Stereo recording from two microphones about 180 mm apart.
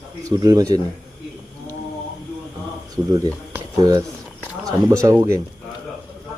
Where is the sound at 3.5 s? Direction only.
20° right (ahead or behind).